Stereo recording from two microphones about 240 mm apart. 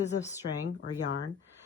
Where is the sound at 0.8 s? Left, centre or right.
Left.